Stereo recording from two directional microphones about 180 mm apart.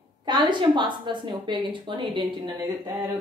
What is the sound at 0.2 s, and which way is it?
A woman's voice, 25° right (ahead or behind).